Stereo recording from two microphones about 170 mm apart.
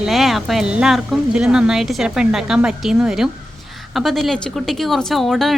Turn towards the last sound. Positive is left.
turn(degrees=0)  # may be behind; listen again after turning